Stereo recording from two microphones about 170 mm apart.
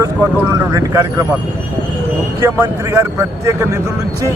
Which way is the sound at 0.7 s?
20° right (ahead or behind).